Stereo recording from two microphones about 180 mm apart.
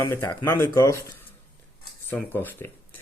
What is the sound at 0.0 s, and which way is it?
Speech, 15° left (ahead or behind).